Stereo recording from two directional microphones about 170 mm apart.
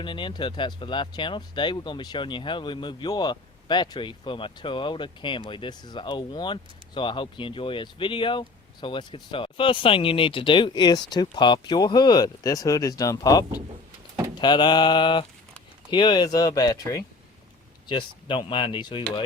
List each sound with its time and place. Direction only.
0.0 s speech: 30° left (ahead or behind)